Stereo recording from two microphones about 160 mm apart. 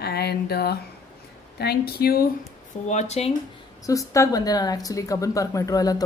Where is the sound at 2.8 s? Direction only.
45° left (ahead or behind).